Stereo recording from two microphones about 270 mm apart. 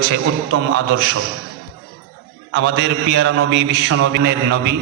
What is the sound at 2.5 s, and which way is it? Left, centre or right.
A man's voice, right.